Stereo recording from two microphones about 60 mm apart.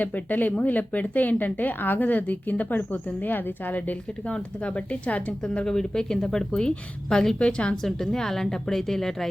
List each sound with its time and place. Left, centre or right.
0.0 s speech: left
5.6 s speech: centre